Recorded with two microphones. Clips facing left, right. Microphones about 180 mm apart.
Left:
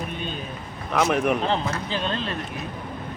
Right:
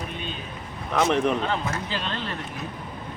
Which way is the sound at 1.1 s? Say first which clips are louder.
Left 1 dB; 10° left (ahead or behind).